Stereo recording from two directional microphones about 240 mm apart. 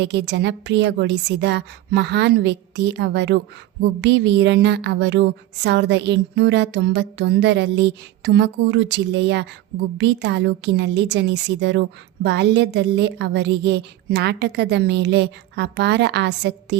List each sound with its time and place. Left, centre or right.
0.0 s a woman's voice: right